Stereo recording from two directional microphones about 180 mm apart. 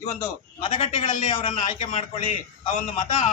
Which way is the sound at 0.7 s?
35° left (ahead or behind).